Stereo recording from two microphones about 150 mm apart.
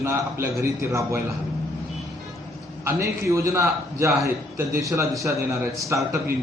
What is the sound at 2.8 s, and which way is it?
A man's voice, 20° right (ahead or behind).